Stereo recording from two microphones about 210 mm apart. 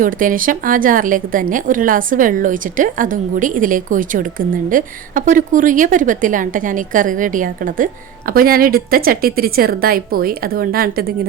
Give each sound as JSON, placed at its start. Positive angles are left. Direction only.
{"t": 0.0, "sound": "a woman's voice", "side_deg": -40}